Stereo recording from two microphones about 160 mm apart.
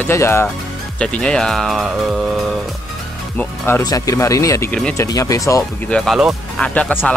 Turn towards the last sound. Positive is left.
turn(degrees=10)  # may be behind; listen again after turning